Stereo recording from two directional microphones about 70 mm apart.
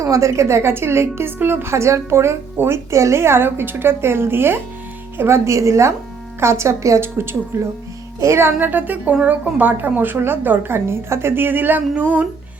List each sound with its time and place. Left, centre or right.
0.0 s a woman's voice: right
7.5 s a woman's voice: right
8.5 s a woman's voice: right